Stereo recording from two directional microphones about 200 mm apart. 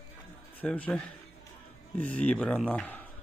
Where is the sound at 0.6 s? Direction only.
5° left (ahead or behind).